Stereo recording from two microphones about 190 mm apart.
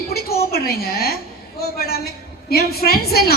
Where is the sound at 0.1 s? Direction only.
55° left (ahead or behind).